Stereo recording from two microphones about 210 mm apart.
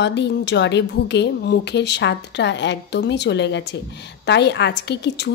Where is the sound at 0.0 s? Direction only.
55° left (ahead or behind).